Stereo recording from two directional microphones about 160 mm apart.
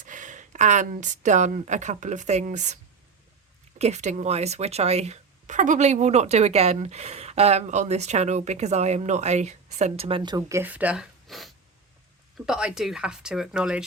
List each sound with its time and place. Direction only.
0.0 s speech: 50° right (ahead or behind)
3.8 s speech: 45° right (ahead or behind); by 10.6 s 25° right (ahead or behind)
10.6 s speech: 10° right (ahead or behind)